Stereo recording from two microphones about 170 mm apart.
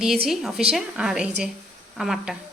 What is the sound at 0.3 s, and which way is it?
Speech, centre (ahead or behind).